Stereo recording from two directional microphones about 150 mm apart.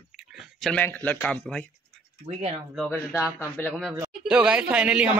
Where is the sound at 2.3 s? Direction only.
45° right (ahead or behind).